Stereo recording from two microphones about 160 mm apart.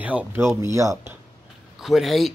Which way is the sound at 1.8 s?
Centre (ahead or behind).